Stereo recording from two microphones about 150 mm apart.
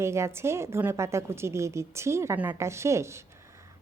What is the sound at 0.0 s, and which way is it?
A woman's voice, 20° right (ahead or behind).